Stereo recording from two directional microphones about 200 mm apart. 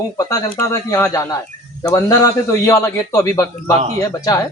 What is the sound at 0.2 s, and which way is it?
Speech, 15° left (ahead or behind).